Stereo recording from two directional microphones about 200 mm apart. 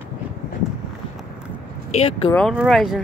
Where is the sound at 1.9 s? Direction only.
30° left (ahead or behind).